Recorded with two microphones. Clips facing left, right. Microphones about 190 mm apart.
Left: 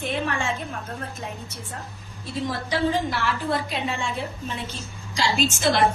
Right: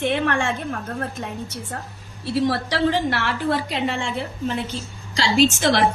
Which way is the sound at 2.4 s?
75° right (ahead or behind).